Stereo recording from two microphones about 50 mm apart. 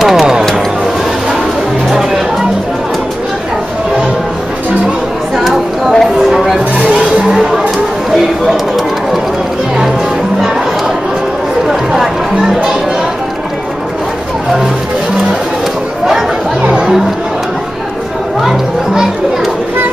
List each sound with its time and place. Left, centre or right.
0.0 s music: centre
1.9 s music: centre
5.3 s a sound: centre
6.3 s music: centre
6.9 s music: right
7.2 s music: centre
8.1 s a sound: centre
11.6 s music: centre
16.6 s chatter: centre
18.4 s music: centre